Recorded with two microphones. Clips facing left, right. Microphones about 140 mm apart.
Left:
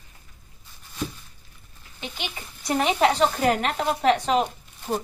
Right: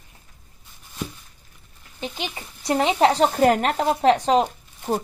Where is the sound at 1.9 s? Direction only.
35° right (ahead or behind).